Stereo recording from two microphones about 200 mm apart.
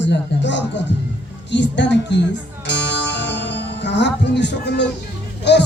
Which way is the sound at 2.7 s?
60° left (ahead or behind).